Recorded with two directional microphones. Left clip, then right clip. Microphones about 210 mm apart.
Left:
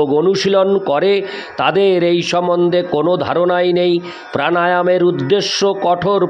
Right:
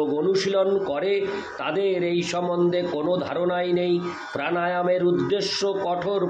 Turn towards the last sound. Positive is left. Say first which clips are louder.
# left 10 dB
turn(degrees=50)  # may be behind; listen again after turning